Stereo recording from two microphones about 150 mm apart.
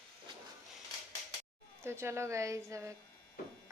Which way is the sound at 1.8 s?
15° right (ahead or behind).